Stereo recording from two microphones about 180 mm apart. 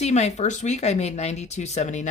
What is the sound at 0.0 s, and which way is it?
Speech, 40° left (ahead or behind).